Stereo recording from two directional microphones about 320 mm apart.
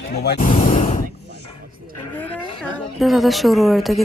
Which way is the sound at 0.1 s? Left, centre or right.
Left.